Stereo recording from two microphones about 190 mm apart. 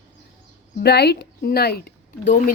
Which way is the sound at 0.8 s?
60° left (ahead or behind).